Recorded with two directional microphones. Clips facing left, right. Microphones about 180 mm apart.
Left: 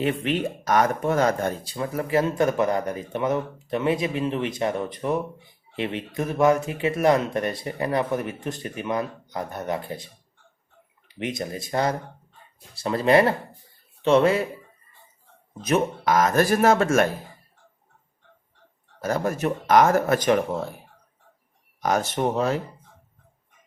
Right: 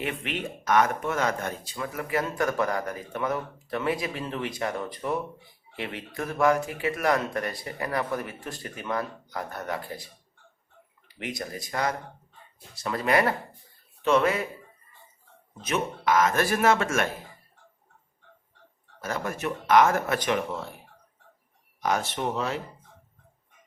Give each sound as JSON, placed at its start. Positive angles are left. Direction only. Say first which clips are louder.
{"t": 0.0, "sound": "speech", "louder": "left 8 dB", "side_deg": 35}
{"t": 11.2, "sound": "speech", "louder": "left 5 dB", "side_deg": 25}
{"t": 15.6, "sound": "speech", "louder": "left 5 dB", "side_deg": 40}
{"t": 18.9, "sound": "speech", "louder": "left 7 dB", "side_deg": 40}
{"t": 21.8, "sound": "speech", "louder": "left 4 dB", "side_deg": 45}